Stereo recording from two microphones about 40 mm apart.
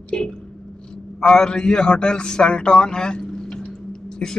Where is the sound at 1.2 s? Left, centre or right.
Left.